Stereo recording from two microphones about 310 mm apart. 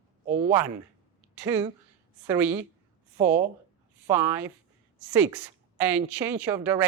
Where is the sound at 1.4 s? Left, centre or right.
Centre.